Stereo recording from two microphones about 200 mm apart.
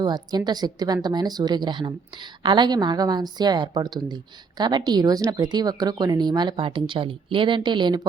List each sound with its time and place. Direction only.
0.0 s a woman's voice: 20° right (ahead or behind)